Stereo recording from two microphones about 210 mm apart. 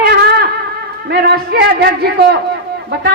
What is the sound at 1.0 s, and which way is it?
A man's voice, 50° right (ahead or behind).